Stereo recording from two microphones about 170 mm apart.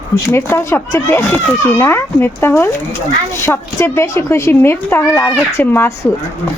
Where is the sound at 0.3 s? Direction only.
15° left (ahead or behind).